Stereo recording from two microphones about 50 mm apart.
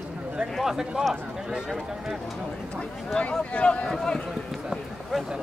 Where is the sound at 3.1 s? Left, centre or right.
Centre.